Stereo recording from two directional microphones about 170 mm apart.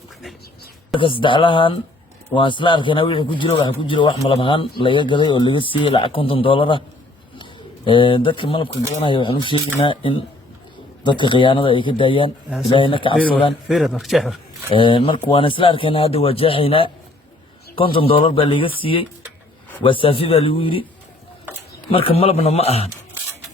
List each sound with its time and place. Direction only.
0.9 s a man's voice: 30° left (ahead or behind)
7.9 s a man's voice: 30° left (ahead or behind)
13.7 s a man's voice: centre (ahead or behind)
14.7 s a man's voice: 30° left (ahead or behind)
21.8 s a man's voice: 35° left (ahead or behind)